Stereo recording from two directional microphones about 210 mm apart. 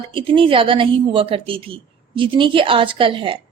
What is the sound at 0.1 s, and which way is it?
A woman's voice, 25° right (ahead or behind).